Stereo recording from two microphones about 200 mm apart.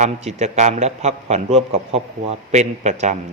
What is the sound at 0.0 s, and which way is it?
A man's voice, 35° right (ahead or behind).